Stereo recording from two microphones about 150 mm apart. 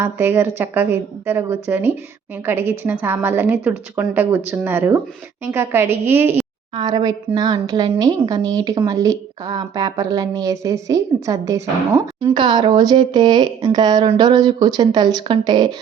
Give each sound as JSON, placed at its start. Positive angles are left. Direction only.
{"t": 0.0, "sound": "a woman's voice", "side_deg": -15}
{"t": 6.7, "sound": "a woman's voice", "side_deg": -30}
{"t": 12.3, "sound": "a woman's voice", "side_deg": -30}